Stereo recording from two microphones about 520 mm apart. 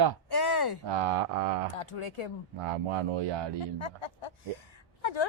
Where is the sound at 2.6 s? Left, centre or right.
Right.